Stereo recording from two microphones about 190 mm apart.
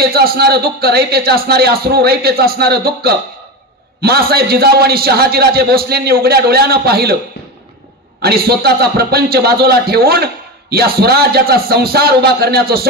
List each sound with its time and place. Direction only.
0.0 s a man's voice: 55° right (ahead or behind)
8.2 s a man's voice: 55° right (ahead or behind)